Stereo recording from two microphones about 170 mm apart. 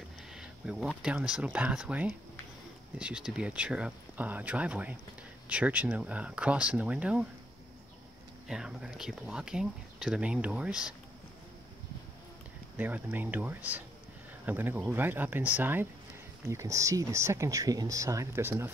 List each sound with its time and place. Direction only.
0.3 s speech: 5° right (ahead or behind)
8.5 s speech: 5° right (ahead or behind)
12.7 s speech: 10° right (ahead or behind)